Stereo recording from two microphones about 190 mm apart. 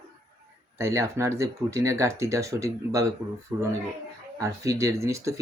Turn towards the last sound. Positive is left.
turn(degrees=-15)  # may be behind; listen again after turning